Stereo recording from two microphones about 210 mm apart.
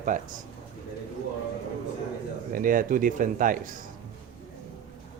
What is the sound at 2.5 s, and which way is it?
Speech, 40° right (ahead or behind).